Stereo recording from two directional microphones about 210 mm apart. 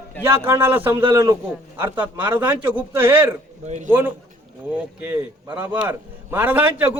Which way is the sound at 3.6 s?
35° right (ahead or behind).